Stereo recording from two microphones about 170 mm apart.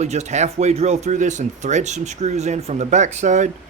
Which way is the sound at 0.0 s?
40° right (ahead or behind).